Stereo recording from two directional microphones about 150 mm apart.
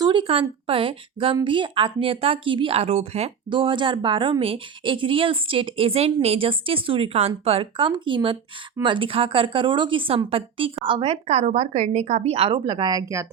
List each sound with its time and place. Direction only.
0.0 s a woman's voice: 35° right (ahead or behind)